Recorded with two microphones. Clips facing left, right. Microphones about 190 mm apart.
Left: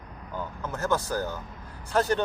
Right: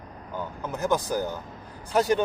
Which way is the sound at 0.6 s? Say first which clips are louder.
Right 2 dB; 15° right (ahead or behind).